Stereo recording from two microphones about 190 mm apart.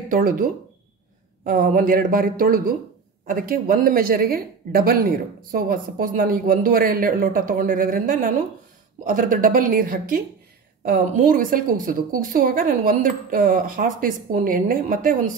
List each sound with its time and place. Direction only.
0.1 s speech: 45° right (ahead or behind)